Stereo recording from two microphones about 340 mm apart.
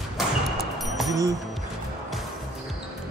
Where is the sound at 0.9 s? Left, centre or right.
Centre.